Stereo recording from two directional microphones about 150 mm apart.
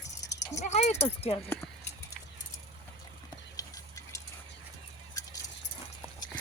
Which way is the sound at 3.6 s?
20° left (ahead or behind).